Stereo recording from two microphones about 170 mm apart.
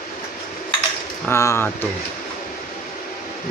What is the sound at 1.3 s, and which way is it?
Speech, 15° left (ahead or behind).